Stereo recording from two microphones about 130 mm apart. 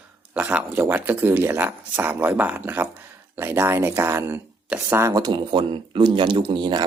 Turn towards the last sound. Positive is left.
turn(degrees=-35)  # may be behind; listen again after turning